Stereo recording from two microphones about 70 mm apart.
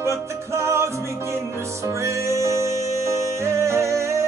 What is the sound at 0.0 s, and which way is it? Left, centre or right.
Music, right.